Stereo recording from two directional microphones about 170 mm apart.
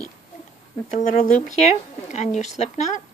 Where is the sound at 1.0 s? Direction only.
45° left (ahead or behind).